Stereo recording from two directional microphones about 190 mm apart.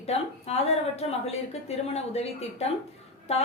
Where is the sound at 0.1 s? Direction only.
35° left (ahead or behind).